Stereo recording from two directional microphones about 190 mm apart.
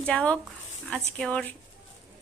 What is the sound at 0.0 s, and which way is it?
A woman's voice, 5° left (ahead or behind).